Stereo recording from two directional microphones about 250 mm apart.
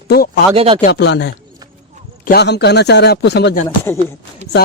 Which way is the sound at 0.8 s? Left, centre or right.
Left.